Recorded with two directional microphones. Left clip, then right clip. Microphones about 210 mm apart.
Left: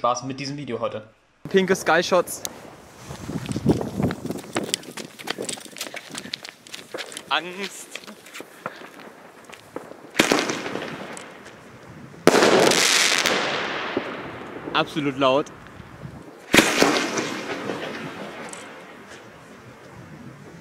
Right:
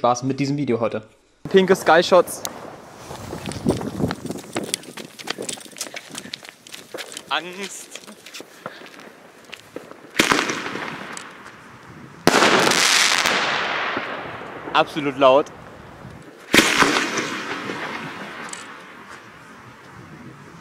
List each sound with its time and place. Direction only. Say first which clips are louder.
0.0 s speech: right 4 dB; 15° right (ahead or behind)
1.5 s speech: right 5 dB; centre (ahead or behind)
3.1 s a sound: right 1 dB; centre (ahead or behind)
9.8 s firecracker: right 1 dB; centre (ahead or behind)
10.4 s fireworks: right 2 dB; centre (ahead or behind)
12.3 s fireworks: even; centre (ahead or behind)
14.7 s speech: right 4 dB; centre (ahead or behind)
16.4 s a sound: right 2 dB; 5° right (ahead or behind)